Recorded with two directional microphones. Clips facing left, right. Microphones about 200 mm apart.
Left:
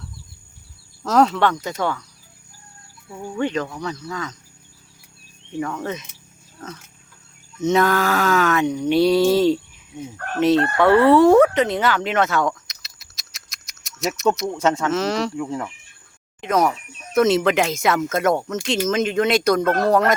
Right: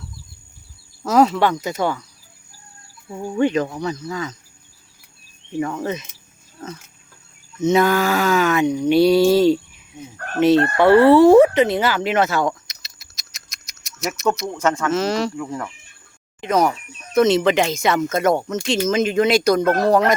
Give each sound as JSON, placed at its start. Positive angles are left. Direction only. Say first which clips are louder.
{"t": 1.0, "sound": "speech", "louder": "right 1 dB", "side_deg": -10}
{"t": 3.1, "sound": "speech", "louder": "right 5 dB", "side_deg": -20}
{"t": 5.5, "sound": "speech", "louder": "right 3 dB", "side_deg": -10}
{"t": 7.6, "sound": "speech", "louder": "right 2 dB", "side_deg": 0}
{"t": 11.0, "sound": "speech", "louder": "right 2 dB", "side_deg": 0}
{"t": 12.6, "sound": "a sound", "louder": "right 1 dB", "side_deg": 0}
{"t": 14.3, "sound": "speech", "louder": "left 2 dB", "side_deg": 0}
{"t": 14.6, "sound": "speech", "louder": "even", "side_deg": 20}
{"t": 14.8, "sound": "speech", "louder": "right 1 dB", "side_deg": 0}
{"t": 16.4, "sound": "speech", "louder": "right 1 dB", "side_deg": 0}